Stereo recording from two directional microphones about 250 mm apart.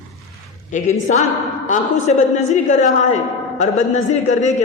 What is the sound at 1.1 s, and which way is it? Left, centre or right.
A man's voice, left.